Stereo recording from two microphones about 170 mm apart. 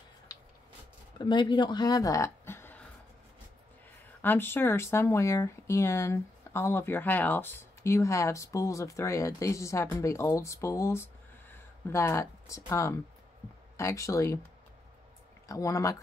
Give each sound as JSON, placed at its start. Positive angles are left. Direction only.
{"t": 1.1, "sound": "speech", "side_deg": 25}
{"t": 4.2, "sound": "speech", "side_deg": 10}
{"t": 15.4, "sound": "speech", "side_deg": 20}